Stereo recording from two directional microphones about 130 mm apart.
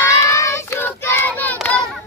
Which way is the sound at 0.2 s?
20° left (ahead or behind).